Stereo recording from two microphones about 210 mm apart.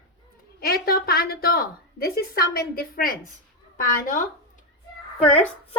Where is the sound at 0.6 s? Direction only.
45° left (ahead or behind).